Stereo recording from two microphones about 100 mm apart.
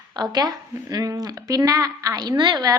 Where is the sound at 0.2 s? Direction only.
40° right (ahead or behind).